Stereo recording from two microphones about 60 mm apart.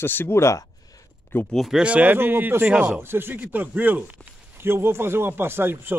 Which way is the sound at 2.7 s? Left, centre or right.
Centre.